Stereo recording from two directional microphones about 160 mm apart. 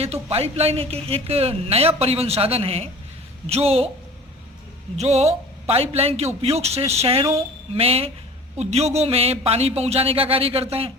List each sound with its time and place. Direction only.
0.0 s speech: 40° right (ahead or behind)
4.9 s speech: 45° right (ahead or behind)